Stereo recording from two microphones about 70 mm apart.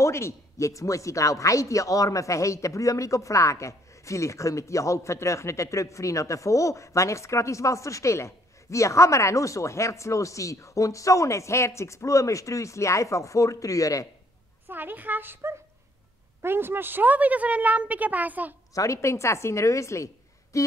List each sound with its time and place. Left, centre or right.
0.0 s speech: left
14.7 s a woman's voice: right
18.8 s speech: left
20.5 s humming: left